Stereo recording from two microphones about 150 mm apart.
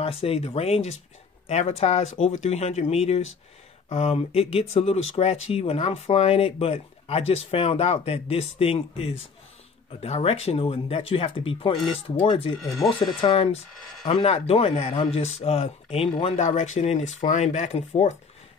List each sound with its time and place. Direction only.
0.0 s speech: 40° left (ahead or behind)
12.6 s speech: centre (ahead or behind)
13.0 s speech: 35° left (ahead or behind)